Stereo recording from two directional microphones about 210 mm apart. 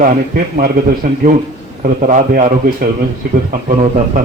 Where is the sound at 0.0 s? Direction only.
40° right (ahead or behind).